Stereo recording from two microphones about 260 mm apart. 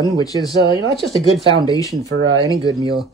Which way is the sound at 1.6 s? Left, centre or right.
Centre.